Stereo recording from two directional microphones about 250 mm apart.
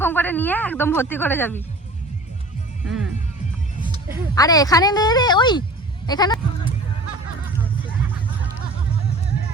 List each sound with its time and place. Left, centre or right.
0.0 s speech: centre
4.4 s speech: centre